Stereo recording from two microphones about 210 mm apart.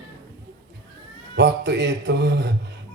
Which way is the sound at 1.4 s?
55° right (ahead or behind).